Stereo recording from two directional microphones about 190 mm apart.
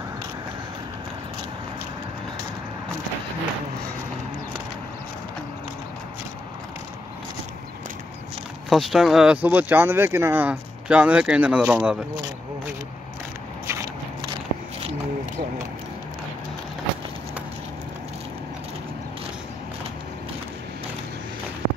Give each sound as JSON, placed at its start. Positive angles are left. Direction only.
{"t": 8.6, "sound": "speech", "side_deg": 0}
{"t": 13.7, "sound": "biting", "side_deg": -20}